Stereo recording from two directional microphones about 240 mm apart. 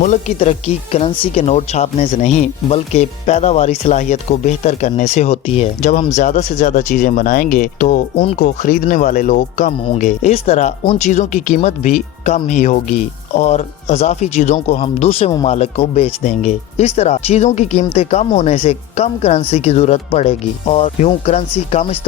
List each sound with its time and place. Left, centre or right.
0.0 s speech: left